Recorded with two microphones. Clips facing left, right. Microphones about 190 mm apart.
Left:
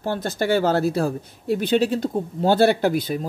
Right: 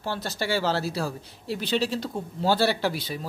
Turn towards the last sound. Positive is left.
turn(degrees=45)  # may be behind; listen again after turning